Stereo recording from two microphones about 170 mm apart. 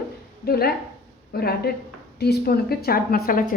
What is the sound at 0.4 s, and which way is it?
A woman's voice, 65° left (ahead or behind).